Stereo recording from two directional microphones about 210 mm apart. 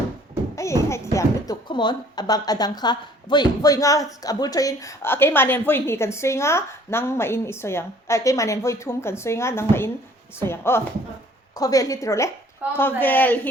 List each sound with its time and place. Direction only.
0.5 s speech: 15° left (ahead or behind)